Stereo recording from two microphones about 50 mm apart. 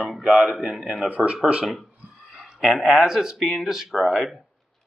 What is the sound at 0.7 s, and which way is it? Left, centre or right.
Speech, centre.